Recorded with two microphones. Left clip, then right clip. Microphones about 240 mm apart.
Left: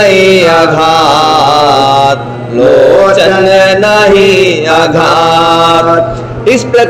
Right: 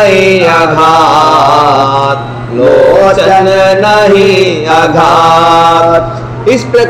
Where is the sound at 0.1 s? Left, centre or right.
Centre.